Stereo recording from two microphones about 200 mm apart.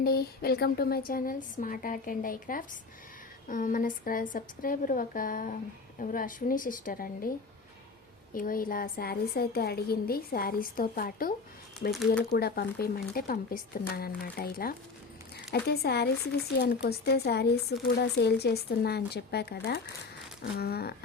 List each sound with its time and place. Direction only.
0.0 s a woman's voice: 50° left (ahead or behind)
11.9 s speech: centre (ahead or behind)
12.2 s a woman's voice: 50° left (ahead or behind)